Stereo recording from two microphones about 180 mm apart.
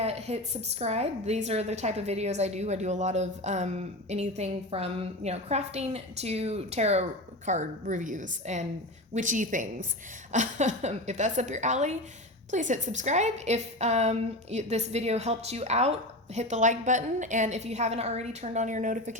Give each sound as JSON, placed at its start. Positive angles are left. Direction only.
{"t": 0.0, "sound": "a woman's voice", "side_deg": -35}